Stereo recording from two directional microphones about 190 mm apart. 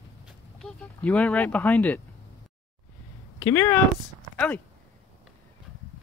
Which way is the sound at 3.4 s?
10° left (ahead or behind).